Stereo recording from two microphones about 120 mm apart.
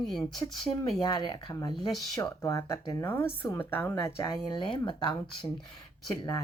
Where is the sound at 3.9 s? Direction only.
35° left (ahead or behind).